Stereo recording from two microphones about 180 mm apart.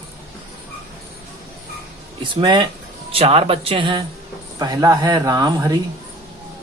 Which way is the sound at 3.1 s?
35° right (ahead or behind).